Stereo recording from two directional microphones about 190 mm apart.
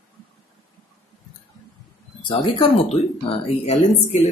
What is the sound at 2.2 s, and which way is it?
Speech, 25° left (ahead or behind).